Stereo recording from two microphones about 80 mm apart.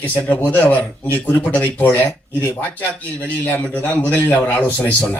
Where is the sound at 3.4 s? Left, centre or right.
Left.